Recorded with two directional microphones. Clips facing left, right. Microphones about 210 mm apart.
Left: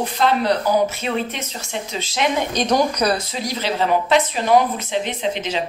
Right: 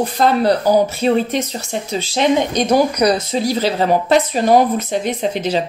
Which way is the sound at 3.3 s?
35° right (ahead or behind).